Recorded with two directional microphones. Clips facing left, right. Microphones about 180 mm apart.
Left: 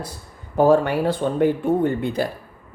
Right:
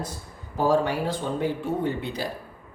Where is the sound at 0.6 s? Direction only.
60° left (ahead or behind).